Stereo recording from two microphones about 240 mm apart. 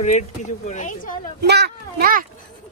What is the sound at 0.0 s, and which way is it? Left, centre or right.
Speech, left.